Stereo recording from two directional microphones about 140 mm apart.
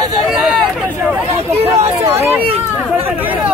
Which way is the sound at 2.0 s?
15° right (ahead or behind).